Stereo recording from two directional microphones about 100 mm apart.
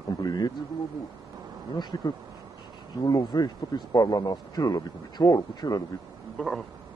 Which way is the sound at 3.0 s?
40° left (ahead or behind).